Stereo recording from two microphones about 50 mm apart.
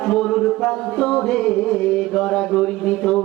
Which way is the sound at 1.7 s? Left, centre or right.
Centre.